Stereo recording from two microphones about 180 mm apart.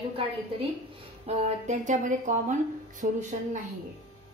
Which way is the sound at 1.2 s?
40° right (ahead or behind).